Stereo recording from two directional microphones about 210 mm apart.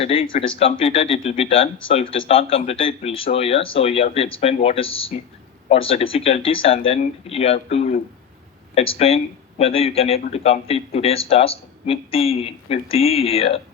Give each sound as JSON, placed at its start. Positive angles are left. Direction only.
{"t": 0.0, "sound": "speech", "side_deg": 25}